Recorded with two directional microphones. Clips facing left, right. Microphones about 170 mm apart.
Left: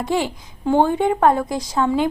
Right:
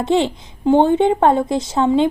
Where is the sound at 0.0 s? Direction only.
25° right (ahead or behind).